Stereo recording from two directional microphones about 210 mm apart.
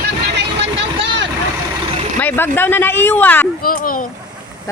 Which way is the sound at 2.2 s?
10° left (ahead or behind).